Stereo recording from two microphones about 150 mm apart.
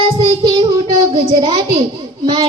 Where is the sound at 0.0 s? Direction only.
40° right (ahead or behind).